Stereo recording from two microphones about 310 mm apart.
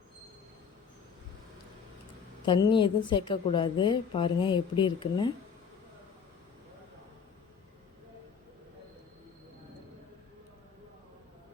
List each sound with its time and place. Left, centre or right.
2.5 s a woman's voice: centre